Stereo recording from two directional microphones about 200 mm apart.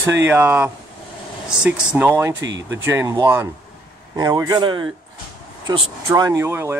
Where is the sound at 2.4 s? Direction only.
65° right (ahead or behind).